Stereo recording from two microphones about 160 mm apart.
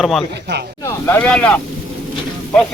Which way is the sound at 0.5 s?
90° right.